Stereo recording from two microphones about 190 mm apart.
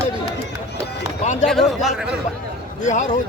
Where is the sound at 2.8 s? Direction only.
40° left (ahead or behind).